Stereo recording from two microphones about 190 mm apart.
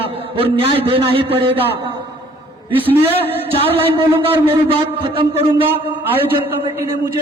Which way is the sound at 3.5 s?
30° right (ahead or behind).